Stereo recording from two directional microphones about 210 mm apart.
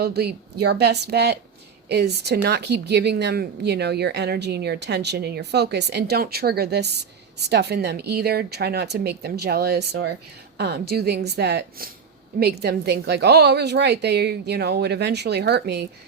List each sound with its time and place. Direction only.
0.0 s a woman's voice: 50° right (ahead or behind)